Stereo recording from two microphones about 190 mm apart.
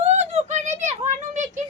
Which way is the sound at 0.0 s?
35° right (ahead or behind).